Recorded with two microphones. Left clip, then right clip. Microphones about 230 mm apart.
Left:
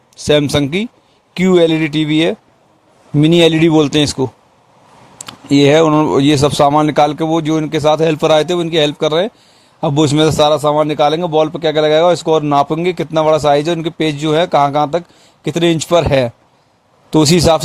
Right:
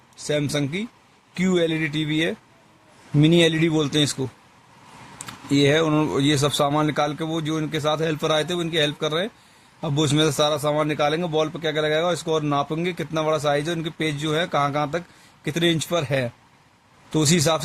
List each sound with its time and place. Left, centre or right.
0.3 s a man's voice: left